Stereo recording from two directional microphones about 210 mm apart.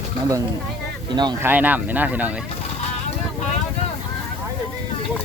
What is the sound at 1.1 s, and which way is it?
Speech, 20° right (ahead or behind).